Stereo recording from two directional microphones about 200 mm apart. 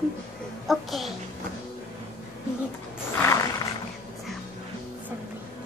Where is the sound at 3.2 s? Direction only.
15° left (ahead or behind).